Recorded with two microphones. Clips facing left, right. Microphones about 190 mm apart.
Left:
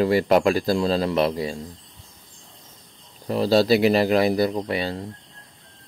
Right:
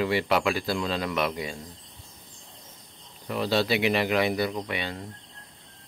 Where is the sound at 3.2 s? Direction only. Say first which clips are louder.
Left 7 dB; 35° left (ahead or behind).